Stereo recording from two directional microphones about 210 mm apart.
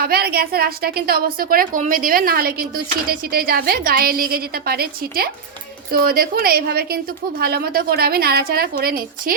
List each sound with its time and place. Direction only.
0.0 s a woman's voice: 45° right (ahead or behind)